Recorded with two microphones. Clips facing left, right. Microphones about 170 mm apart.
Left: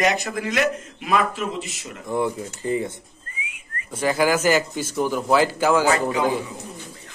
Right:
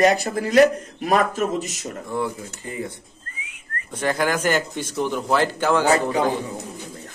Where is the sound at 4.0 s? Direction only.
5° left (ahead or behind).